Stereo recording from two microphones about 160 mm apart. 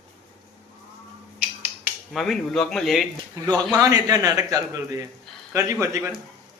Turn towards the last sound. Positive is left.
turn(degrees=-20)  # may be behind; listen again after turning